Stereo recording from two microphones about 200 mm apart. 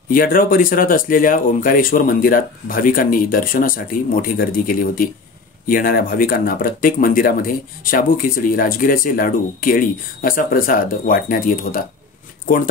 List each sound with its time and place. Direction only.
0.1 s speech: 45° left (ahead or behind)